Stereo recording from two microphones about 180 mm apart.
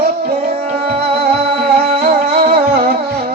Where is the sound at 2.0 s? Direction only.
55° right (ahead or behind).